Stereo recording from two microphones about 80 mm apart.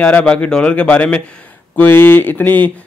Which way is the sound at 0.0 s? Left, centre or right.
Centre.